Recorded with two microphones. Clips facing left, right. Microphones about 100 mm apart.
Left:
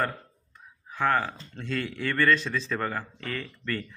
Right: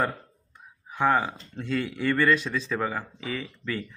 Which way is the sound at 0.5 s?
15° right (ahead or behind).